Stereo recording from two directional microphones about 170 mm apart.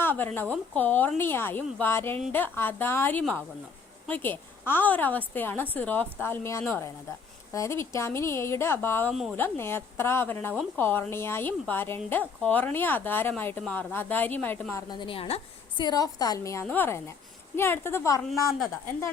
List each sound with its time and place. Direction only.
0.0 s a woman's voice: 10° left (ahead or behind); by 15.4 s 35° left (ahead or behind)
15.8 s a woman's voice: 25° left (ahead or behind)